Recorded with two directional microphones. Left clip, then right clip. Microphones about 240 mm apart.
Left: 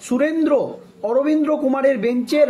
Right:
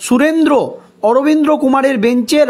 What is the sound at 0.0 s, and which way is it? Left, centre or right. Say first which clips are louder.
Speech: right 7 dB; right.